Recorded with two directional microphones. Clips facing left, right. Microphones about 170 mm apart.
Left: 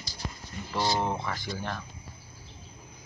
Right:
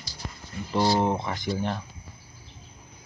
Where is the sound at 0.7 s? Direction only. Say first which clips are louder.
Right 5 dB; 20° right (ahead or behind).